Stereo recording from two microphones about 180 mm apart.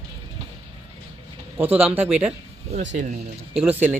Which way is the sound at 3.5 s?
10° right (ahead or behind).